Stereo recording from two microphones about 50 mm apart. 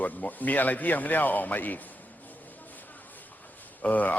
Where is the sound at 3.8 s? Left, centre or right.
Left.